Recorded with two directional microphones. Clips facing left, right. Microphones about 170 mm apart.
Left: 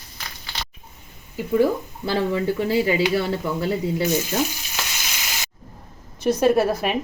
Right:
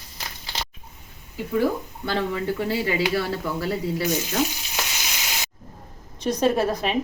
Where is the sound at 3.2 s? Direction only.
25° left (ahead or behind).